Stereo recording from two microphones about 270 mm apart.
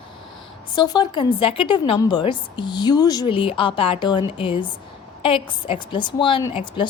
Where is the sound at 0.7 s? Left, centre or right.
Centre.